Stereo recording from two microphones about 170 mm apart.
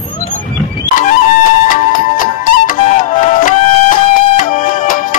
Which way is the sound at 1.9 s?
55° left (ahead or behind).